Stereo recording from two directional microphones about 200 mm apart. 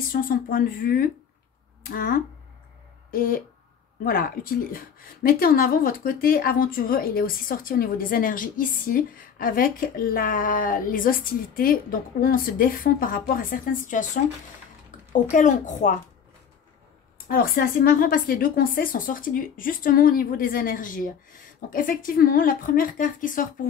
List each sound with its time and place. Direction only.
0.1 s a woman's voice: 45° left (ahead or behind)
17.3 s a woman's voice: 45° left (ahead or behind)